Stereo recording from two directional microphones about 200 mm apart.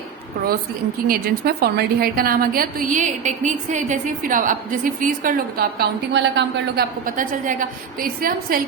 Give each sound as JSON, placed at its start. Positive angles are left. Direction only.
{"t": 1.0, "sound": "a woman's voice", "side_deg": -50}
{"t": 7.0, "sound": "a woman's voice", "side_deg": -40}